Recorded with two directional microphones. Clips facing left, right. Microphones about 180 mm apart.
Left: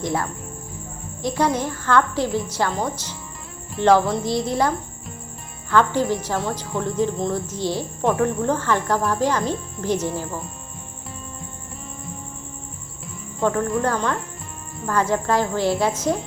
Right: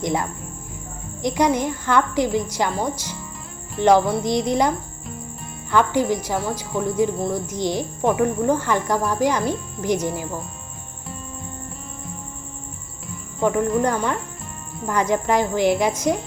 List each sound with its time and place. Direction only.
0.0 s a woman's voice: 15° right (ahead or behind)
5.7 s a woman's voice: 15° right (ahead or behind)
13.4 s cricket: 15° right (ahead or behind)
13.8 s a woman's voice: 15° right (ahead or behind)